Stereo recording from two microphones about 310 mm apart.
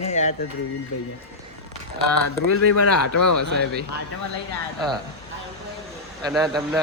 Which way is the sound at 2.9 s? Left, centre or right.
Left.